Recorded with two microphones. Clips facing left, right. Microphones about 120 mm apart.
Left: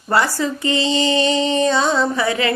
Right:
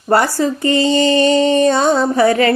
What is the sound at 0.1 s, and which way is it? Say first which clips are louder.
Music: right 4 dB; 40° right (ahead or behind).